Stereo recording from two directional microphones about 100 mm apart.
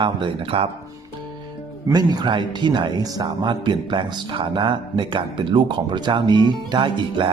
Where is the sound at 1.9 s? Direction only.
45° right (ahead or behind).